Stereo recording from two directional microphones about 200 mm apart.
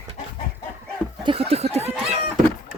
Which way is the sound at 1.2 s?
30° right (ahead or behind).